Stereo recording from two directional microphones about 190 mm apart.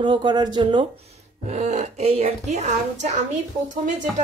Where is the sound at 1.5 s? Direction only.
40° right (ahead or behind).